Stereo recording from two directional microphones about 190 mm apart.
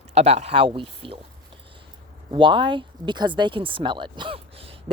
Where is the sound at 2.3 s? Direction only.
25° right (ahead or behind).